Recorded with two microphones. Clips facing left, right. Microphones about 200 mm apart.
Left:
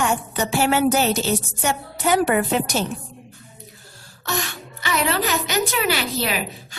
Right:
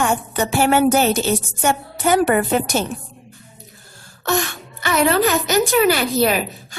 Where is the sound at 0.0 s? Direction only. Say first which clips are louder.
Right 3 dB; 50° right (ahead or behind).